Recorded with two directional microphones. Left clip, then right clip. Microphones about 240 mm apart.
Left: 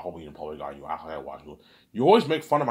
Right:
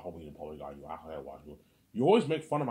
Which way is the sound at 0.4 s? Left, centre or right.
Left.